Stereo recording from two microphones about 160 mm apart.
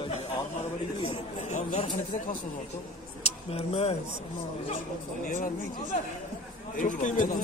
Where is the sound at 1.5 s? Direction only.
45° left (ahead or behind).